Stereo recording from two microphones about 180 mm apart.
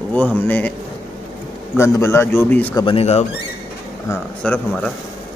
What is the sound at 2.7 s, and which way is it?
Speech, 30° left (ahead or behind).